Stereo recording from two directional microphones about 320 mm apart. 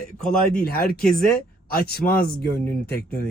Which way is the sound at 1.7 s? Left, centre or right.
Left.